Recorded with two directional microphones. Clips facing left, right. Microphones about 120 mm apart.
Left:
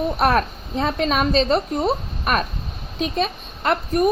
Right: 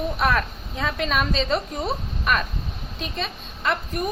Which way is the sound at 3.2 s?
50° left (ahead or behind).